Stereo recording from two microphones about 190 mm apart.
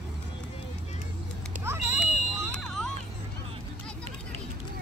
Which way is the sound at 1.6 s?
15° right (ahead or behind).